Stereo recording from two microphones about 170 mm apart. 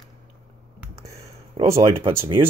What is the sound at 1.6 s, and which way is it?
Speech, 30° right (ahead or behind).